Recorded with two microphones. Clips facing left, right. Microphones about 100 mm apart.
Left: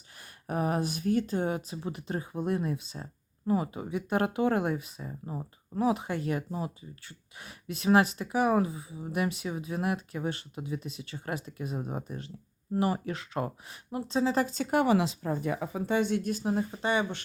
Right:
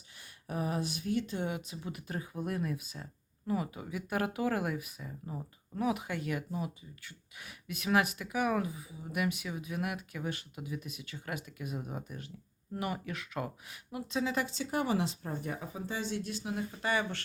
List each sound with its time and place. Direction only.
0.2 s speech: 50° left (ahead or behind)
14.7 s speech: 80° left; by 17.2 s 20° left (ahead or behind)